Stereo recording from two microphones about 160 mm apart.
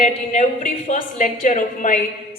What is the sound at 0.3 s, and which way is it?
A woman's voice, 50° left (ahead or behind).